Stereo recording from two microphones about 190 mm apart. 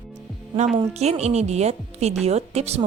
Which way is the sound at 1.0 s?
35° right (ahead or behind).